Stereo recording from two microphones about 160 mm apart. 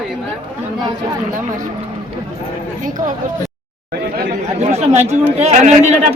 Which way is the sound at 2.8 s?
55° right (ahead or behind).